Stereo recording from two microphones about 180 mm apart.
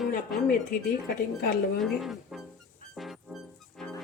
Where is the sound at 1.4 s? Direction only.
65° left (ahead or behind).